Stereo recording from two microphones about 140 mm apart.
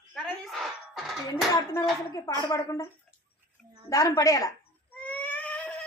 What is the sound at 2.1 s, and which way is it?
Speech, 25° left (ahead or behind).